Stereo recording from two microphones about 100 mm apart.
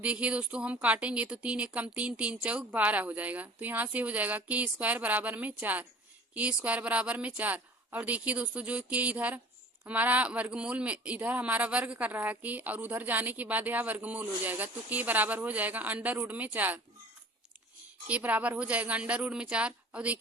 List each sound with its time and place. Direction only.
0.0 s a man's voice: 10° right (ahead or behind)
18.1 s a man's voice: 15° right (ahead or behind)